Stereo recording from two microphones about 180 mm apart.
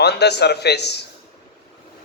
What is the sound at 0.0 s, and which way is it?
Speech, 70° left (ahead or behind).